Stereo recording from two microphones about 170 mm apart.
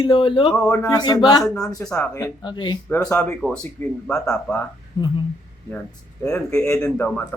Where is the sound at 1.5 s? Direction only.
Centre (ahead or behind).